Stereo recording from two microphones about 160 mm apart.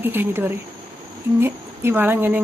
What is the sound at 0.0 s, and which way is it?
Speech, 15° right (ahead or behind).